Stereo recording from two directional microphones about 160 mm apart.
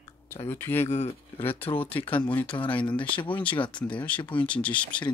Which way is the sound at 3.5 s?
30° left (ahead or behind).